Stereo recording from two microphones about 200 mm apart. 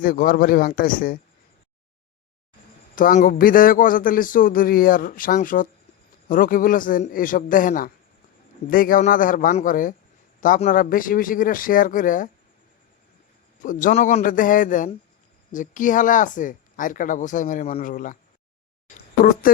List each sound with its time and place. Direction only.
0.0 s a man's voice: 45° left (ahead or behind)
2.9 s a man's voice: 45° left (ahead or behind)
13.6 s speech: 40° left (ahead or behind)
18.9 s a sound: 40° left (ahead or behind)